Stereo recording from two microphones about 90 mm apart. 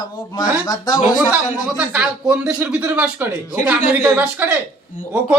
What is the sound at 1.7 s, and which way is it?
A man's voice, 15° right (ahead or behind).